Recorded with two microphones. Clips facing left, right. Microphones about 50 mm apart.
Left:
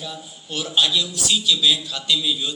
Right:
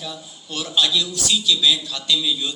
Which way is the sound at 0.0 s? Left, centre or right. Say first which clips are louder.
Even; left.